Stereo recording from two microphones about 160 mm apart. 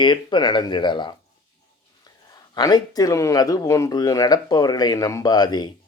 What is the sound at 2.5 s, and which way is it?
Speech, 25° left (ahead or behind).